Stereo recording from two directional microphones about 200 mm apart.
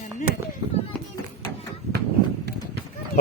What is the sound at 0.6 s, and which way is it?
Run, 25° right (ahead or behind).